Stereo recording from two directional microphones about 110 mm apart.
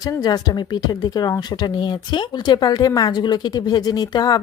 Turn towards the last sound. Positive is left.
turn(degrees=40)  # may be behind; listen again after turning